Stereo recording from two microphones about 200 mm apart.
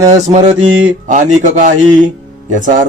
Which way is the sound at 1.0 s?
40° right (ahead or behind).